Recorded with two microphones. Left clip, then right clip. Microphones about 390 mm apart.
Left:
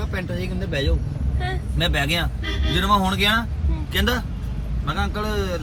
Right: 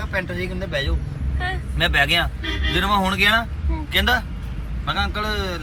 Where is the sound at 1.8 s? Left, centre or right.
Centre.